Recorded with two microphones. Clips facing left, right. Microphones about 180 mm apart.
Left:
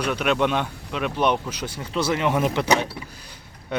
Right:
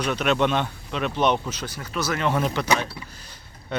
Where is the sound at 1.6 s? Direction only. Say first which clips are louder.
Left 3 dB; 25° left (ahead or behind).